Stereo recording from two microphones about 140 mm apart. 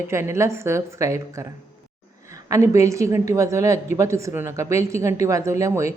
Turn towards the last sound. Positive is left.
turn(degrees=-20)  # may be behind; listen again after turning